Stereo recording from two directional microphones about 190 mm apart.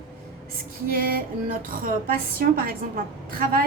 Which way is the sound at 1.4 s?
50° right (ahead or behind).